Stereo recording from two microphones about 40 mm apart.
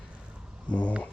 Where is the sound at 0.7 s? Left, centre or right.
Left.